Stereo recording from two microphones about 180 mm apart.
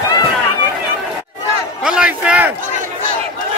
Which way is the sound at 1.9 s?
5° right (ahead or behind).